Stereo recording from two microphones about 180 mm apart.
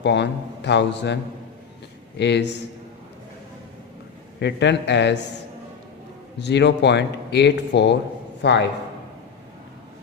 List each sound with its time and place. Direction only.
0.0 s speech: 75° left (ahead or behind)
4.4 s speech: 75° left (ahead or behind)
6.4 s speech: 75° left (ahead or behind)